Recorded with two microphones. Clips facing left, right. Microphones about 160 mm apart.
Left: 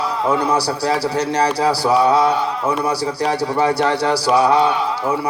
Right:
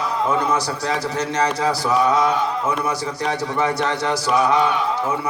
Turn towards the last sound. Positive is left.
turn(degrees=35)  # may be behind; listen again after turning